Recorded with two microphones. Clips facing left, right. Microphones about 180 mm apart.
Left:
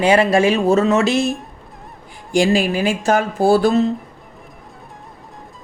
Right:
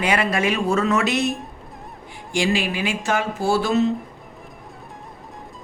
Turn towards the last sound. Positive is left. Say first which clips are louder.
# left 6 dB
turn(degrees=35)  # may be behind; listen again after turning